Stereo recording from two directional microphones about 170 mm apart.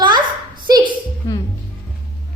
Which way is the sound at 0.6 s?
25° right (ahead or behind).